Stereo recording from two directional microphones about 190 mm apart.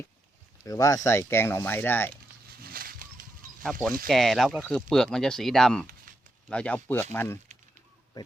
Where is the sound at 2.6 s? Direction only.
50° right (ahead or behind).